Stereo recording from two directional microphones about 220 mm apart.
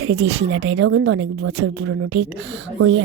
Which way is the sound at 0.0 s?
70° right (ahead or behind).